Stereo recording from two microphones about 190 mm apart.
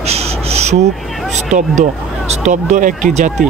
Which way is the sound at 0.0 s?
35° right (ahead or behind).